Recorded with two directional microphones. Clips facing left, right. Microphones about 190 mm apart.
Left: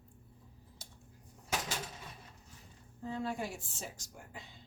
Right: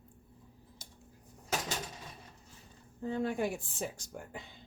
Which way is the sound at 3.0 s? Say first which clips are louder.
Right 5 dB; 60° right (ahead or behind).